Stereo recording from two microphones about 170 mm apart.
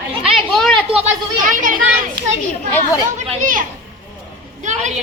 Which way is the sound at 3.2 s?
45° right (ahead or behind).